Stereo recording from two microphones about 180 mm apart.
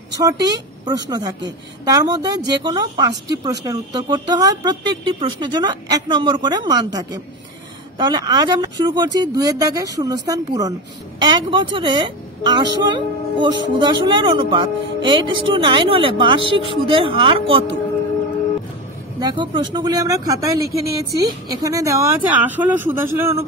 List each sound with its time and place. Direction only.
0.1 s a woman's voice: 20° right (ahead or behind)
19.1 s speech: 25° right (ahead or behind)